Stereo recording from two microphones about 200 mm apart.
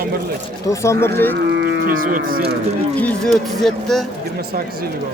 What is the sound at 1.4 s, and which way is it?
Speech, 55° right (ahead or behind).